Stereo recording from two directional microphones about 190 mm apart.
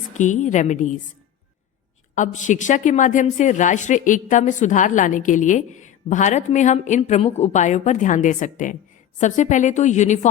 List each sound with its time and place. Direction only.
0.1 s a woman's voice: 40° left (ahead or behind)
2.1 s a woman's voice: 40° left (ahead or behind)